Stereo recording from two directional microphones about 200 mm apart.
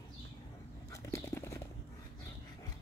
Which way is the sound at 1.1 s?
15° left (ahead or behind).